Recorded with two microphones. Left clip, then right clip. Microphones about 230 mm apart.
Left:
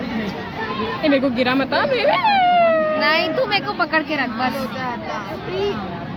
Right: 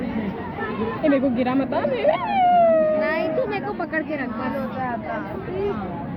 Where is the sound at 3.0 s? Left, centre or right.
Left.